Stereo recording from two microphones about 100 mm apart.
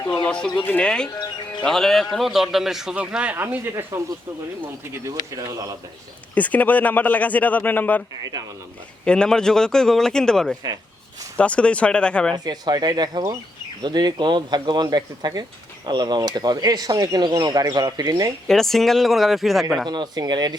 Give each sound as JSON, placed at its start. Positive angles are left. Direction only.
{"t": 0.1, "sound": "speech", "side_deg": 10}
{"t": 0.9, "sound": "speech", "side_deg": 10}
{"t": 4.8, "sound": "speech", "side_deg": -30}
{"t": 6.3, "sound": "speech", "side_deg": 15}
{"t": 8.2, "sound": "speech", "side_deg": -40}
{"t": 9.0, "sound": "speech", "side_deg": 10}
{"t": 12.5, "sound": "speech", "side_deg": -45}
{"t": 18.4, "sound": "speech", "side_deg": 5}
{"t": 19.9, "sound": "speech", "side_deg": -45}